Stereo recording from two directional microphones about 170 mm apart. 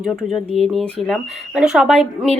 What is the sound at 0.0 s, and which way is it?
Speech, centre (ahead or behind).